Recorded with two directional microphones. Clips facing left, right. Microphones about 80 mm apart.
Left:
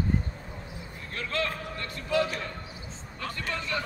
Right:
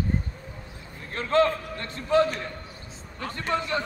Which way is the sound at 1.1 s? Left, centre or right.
Right.